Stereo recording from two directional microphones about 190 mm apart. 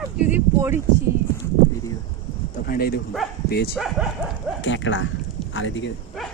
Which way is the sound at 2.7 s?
50° left (ahead or behind).